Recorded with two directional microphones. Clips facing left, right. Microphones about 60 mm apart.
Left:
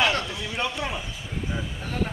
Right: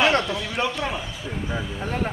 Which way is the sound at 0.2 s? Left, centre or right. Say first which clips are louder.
Right 5 dB; centre.